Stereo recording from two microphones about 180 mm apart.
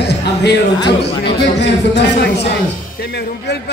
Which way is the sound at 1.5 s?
70° left (ahead or behind).